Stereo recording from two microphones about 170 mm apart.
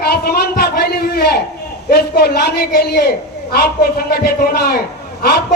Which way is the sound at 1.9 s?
70° left (ahead or behind).